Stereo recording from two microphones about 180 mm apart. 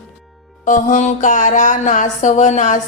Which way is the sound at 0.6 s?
45° left (ahead or behind).